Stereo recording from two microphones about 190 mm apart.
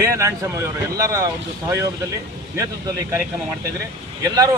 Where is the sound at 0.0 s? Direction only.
15° right (ahead or behind).